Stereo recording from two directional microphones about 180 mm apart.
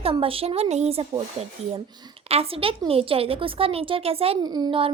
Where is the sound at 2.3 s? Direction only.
30° right (ahead or behind).